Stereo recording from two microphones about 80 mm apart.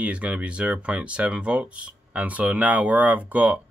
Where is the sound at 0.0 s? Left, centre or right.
Centre.